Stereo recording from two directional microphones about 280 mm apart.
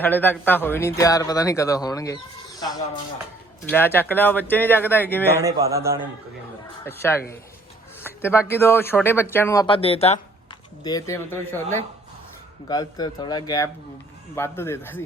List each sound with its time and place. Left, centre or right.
0.0 s speech: centre
5.4 s a man's voice: centre
6.8 s speech: centre